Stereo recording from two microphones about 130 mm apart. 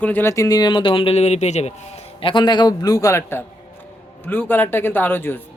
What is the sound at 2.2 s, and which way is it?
A man's voice, 35° left (ahead or behind).